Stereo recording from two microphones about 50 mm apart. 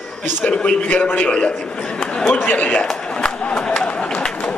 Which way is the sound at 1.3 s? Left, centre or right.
Left.